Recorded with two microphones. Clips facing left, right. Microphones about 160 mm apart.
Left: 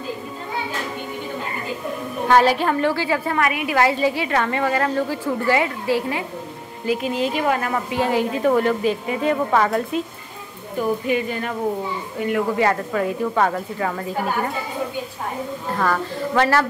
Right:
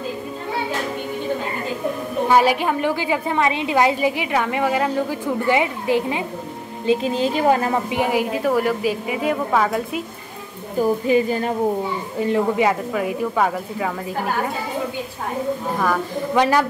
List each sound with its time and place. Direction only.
2.2 s a woman's voice: 10° right (ahead or behind)
6.9 s a woman's voice: 30° right (ahead or behind); by 10.0 s 5° right (ahead or behind)
10.8 s a woman's voice: 35° right (ahead or behind)
12.5 s a woman's voice: 10° right (ahead or behind)
15.7 s a woman's voice: 10° right (ahead or behind)